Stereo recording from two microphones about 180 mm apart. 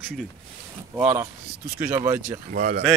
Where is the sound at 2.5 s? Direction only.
55° right (ahead or behind).